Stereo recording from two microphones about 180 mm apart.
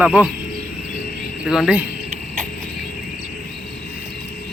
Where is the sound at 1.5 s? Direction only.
5° right (ahead or behind).